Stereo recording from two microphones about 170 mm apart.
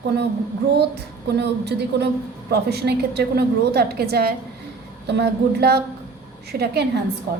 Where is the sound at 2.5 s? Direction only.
70° right (ahead or behind).